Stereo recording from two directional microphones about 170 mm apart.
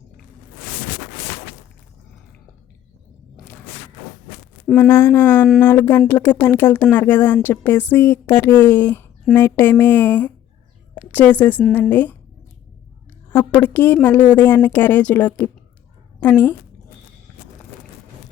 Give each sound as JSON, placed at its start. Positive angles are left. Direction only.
{"t": 4.6, "sound": "a woman's voice", "side_deg": 10}
{"t": 13.3, "sound": "a woman's voice", "side_deg": 10}